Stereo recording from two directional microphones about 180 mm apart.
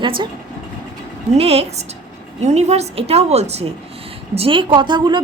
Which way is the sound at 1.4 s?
35° right (ahead or behind).